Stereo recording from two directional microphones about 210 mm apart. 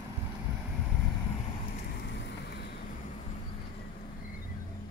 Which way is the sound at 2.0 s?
55° left (ahead or behind).